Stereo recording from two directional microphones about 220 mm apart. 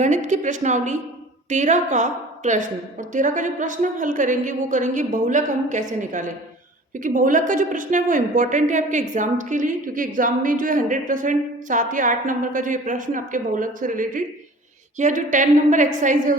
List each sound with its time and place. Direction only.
0.0 s speech: 35° right (ahead or behind)